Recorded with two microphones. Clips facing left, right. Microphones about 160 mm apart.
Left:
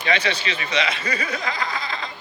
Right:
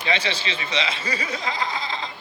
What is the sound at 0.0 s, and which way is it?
Speech, 25° right (ahead or behind).